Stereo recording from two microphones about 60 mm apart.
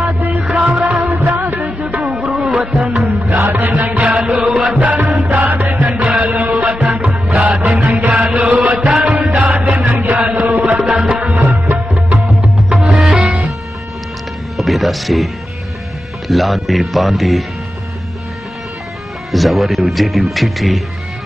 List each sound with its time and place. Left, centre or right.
0.2 s music: right
3.3 s music: right
4.1 s music: centre
4.8 s music: right
5.9 s music: centre
9.3 s music: right
10.8 s music: centre
12.3 s music: centre
14.6 s music: centre
16.3 s speech: centre
19.3 s speech: centre